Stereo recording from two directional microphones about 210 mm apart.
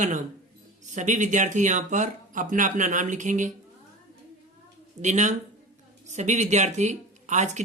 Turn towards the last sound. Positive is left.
turn(degrees=-35)  # may be behind; listen again after turning